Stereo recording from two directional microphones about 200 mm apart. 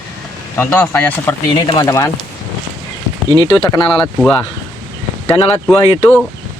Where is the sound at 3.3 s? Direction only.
20° left (ahead or behind).